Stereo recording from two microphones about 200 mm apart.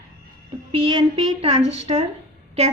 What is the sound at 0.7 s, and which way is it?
A woman's voice, 25° right (ahead or behind).